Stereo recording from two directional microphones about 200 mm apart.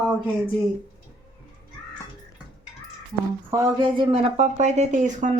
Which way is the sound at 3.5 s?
20° right (ahead or behind).